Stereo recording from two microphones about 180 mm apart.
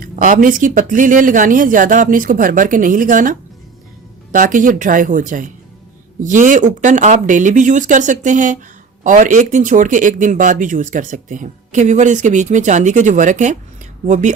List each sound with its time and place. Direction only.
0.0 s speech: 45° right (ahead or behind)